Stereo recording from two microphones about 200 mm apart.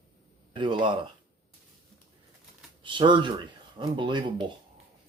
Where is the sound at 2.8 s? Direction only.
25° right (ahead or behind).